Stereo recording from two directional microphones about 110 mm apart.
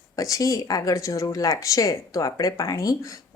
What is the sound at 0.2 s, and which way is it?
Speech, 30° left (ahead or behind).